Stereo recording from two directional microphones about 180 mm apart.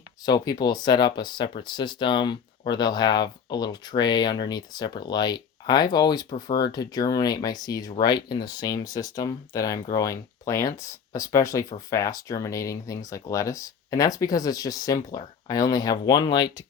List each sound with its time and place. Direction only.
0.3 s speech: 20° left (ahead or behind)